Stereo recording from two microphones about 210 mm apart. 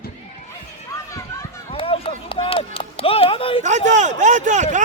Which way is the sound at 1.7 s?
25° left (ahead or behind).